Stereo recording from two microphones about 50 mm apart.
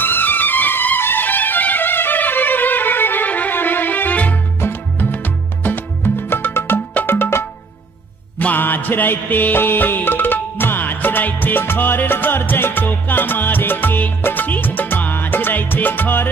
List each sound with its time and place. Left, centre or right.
0.0 s music: left
4.6 s music: left
8.4 s music: left